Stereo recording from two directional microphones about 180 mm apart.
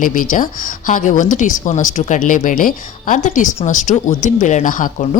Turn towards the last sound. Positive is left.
turn(degrees=45)  # may be behind; listen again after turning